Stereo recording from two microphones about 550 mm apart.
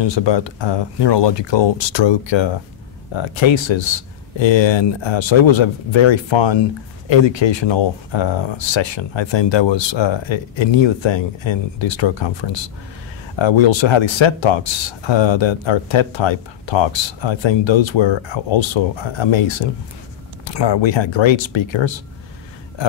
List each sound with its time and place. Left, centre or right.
0.0 s speech: left